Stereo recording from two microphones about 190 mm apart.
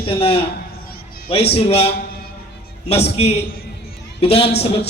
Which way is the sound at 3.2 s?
35° left (ahead or behind).